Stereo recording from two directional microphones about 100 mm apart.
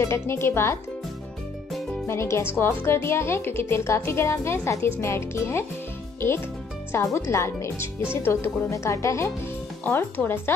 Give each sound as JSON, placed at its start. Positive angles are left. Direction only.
{"t": 0.0, "sound": "a woman's voice", "side_deg": 25}
{"t": 2.0, "sound": "a woman's voice", "side_deg": 25}
{"t": 6.9, "sound": "a woman's voice", "side_deg": 25}